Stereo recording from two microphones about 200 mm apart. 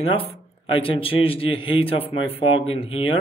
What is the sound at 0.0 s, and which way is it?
Speech, 30° left (ahead or behind).